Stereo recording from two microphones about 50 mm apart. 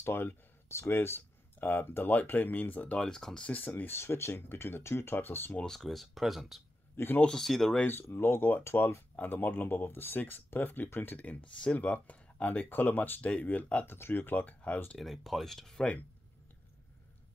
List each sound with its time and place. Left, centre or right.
0.0 s speech: left
0.9 s speech: left
3.0 s speech: centre
3.4 s speech: left
4.0 s speech: left
5.7 s speech: centre
7.9 s speech: left
11.1 s speech: left
13.8 s speech: left
15.0 s speech: centre